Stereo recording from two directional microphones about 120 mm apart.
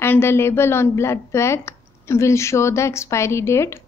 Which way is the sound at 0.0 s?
20° left (ahead or behind).